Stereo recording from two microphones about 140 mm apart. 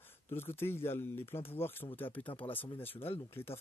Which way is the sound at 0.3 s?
15° left (ahead or behind).